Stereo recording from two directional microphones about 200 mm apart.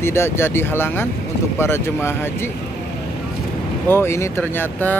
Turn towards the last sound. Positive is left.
turn(degrees=10)  # may be behind; listen again after turning